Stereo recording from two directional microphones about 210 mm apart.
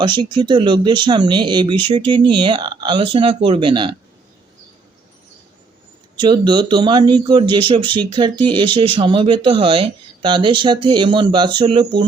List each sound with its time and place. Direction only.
0.0 s speech: 20° right (ahead or behind)
6.1 s speech: 20° right (ahead or behind)